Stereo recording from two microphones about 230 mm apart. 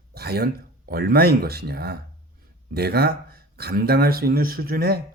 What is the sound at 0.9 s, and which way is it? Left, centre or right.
Speech, right.